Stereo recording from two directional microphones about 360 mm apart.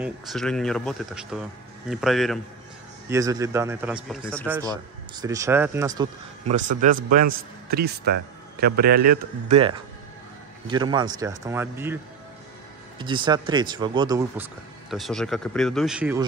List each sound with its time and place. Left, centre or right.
0.0 s speech: centre
4.6 s speech: centre
6.5 s a man's voice: right
10.7 s speech: centre
13.0 s speech: centre